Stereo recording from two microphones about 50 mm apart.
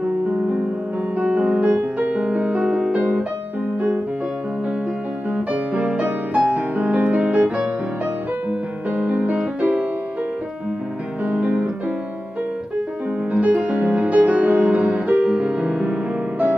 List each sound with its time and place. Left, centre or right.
1.1 s music: right
5.8 s music: right
11.2 s music: right
13.3 s music: right